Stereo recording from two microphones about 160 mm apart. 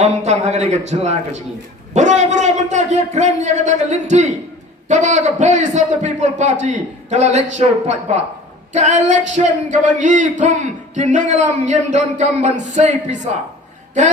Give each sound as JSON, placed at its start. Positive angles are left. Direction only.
{"t": 0.0, "sound": "speech", "side_deg": -45}